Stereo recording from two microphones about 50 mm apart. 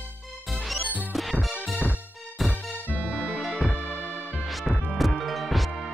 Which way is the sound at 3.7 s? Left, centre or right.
Left.